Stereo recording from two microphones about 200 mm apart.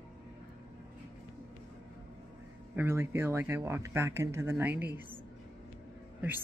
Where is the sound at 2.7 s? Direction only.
10° right (ahead or behind).